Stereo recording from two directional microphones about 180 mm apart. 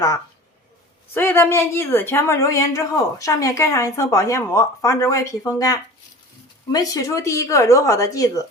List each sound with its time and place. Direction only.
1.1 s a woman's voice: 10° left (ahead or behind)